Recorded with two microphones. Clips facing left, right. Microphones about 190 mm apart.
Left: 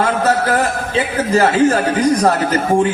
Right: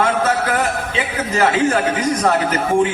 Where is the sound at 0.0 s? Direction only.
35° left (ahead or behind).